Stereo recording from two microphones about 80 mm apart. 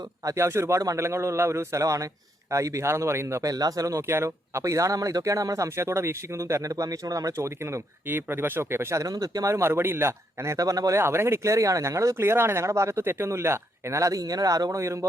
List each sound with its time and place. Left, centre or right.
0.3 s speech: right
3.5 s speech: right
7.3 s speech: right
11.0 s speech: right